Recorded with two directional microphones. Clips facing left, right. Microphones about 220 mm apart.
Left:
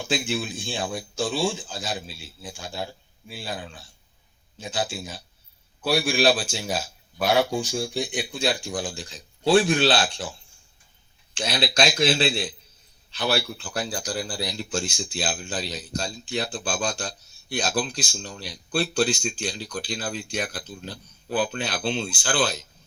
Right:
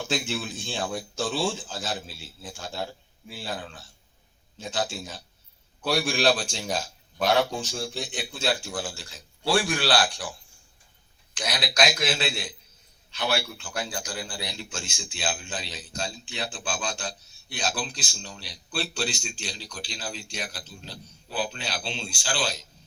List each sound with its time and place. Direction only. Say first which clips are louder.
0.0 s a man's voice: left 3 dB; 10° left (ahead or behind)
11.3 s a man's voice: left 2 dB; 30° left (ahead or behind)
17.9 s speech: left 6 dB; 40° left (ahead or behind)